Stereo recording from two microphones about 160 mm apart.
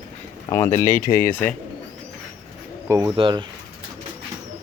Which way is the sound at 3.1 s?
30° right (ahead or behind).